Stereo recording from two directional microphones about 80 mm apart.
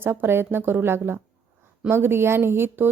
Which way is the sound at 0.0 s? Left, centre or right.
Right.